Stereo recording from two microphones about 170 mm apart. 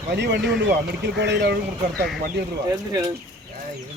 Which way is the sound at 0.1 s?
80° right.